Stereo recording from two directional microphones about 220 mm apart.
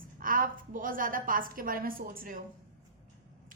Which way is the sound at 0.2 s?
40° right (ahead or behind).